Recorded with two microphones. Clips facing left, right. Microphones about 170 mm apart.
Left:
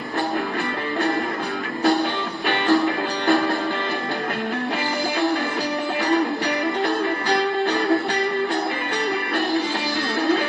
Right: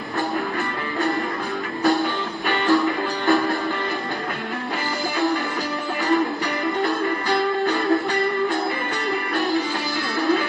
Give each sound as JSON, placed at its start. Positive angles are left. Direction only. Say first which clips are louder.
{"t": 1.8, "sound": "music", "louder": "even", "side_deg": 20}
{"t": 10.2, "sound": "music", "louder": "even", "side_deg": 20}